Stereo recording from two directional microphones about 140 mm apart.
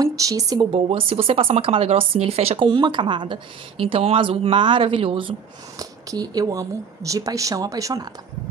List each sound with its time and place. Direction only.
0.0 s speech: 25° right (ahead or behind); by 2.7 s 45° right (ahead or behind)
2.7 s speech: 30° right (ahead or behind)
5.8 s speech: 25° right (ahead or behind)